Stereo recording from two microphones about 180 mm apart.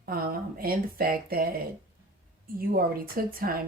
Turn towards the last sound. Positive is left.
turn(degrees=-55)  # may be behind; listen again after turning